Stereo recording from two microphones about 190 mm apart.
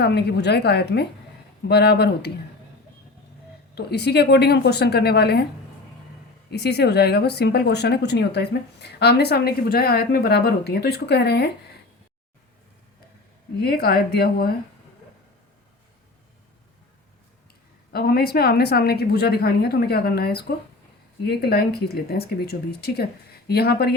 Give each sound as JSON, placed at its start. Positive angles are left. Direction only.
{"t": 0.0, "sound": "a woman's voice", "side_deg": 60}
{"t": 3.8, "sound": "a woman's voice", "side_deg": 60}
{"t": 6.5, "sound": "a woman's voice", "side_deg": 60}
{"t": 13.6, "sound": "a woman's voice", "side_deg": 55}
{"t": 17.9, "sound": "a woman's voice", "side_deg": 55}